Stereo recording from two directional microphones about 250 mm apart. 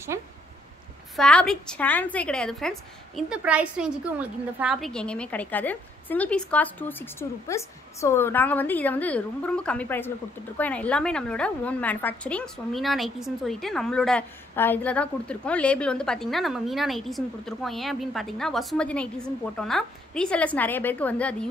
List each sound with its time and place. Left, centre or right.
1.1 s a woman's voice: centre